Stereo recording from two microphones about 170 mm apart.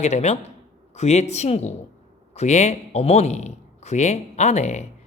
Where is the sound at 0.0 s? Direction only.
40° left (ahead or behind).